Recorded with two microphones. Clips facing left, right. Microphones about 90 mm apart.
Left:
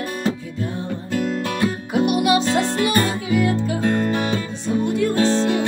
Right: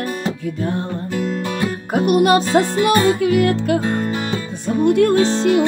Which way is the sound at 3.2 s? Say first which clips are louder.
Right 4 dB; 70° right (ahead or behind).